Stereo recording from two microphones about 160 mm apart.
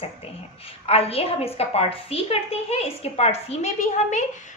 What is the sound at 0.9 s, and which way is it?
A woman's voice, 40° left (ahead or behind).